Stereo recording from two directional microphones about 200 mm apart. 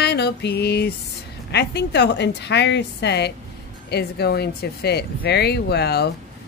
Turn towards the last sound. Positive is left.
turn(degrees=55)  # may be behind; listen again after turning